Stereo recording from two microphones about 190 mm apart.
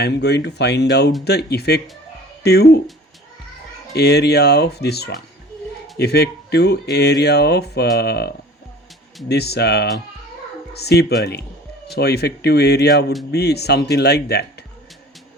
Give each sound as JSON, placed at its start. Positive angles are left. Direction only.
{"t": 0.0, "sound": "speech", "side_deg": 60}
{"t": 3.9, "sound": "speech", "side_deg": 60}
{"t": 9.3, "sound": "speech", "side_deg": 60}